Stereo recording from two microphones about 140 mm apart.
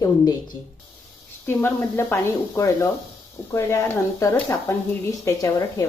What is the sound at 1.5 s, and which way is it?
Speech, 15° left (ahead or behind).